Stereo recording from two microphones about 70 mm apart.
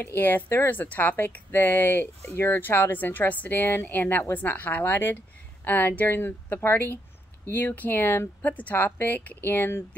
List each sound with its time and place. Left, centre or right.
0.0 s speech: left